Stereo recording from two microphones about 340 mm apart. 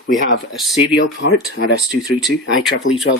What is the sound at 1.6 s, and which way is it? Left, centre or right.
Speech, left.